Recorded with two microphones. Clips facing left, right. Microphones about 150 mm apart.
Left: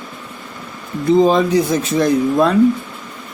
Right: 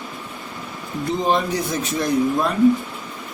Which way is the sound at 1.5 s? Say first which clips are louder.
Left 8 dB; 90° left.